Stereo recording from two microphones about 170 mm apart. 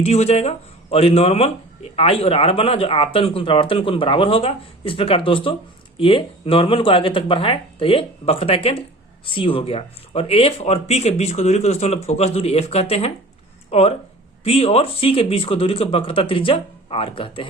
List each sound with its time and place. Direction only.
0.0 s speech: 40° left (ahead or behind)